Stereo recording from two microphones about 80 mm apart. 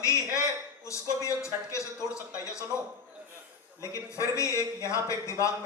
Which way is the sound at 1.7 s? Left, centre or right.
Left.